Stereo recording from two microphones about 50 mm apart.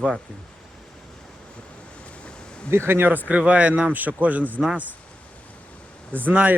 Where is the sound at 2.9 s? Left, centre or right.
Right.